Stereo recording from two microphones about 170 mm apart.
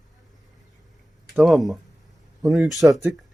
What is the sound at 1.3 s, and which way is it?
Speech, centre (ahead or behind).